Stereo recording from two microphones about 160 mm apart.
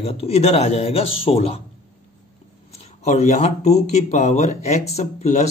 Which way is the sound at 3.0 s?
45° left (ahead or behind).